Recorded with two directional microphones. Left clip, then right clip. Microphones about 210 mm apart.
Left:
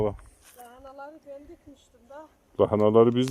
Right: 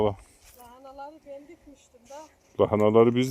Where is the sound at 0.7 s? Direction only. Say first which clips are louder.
Right 1 dB; 50° right (ahead or behind).